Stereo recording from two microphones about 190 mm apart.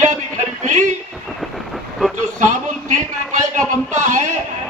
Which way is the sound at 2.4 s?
40° right (ahead or behind).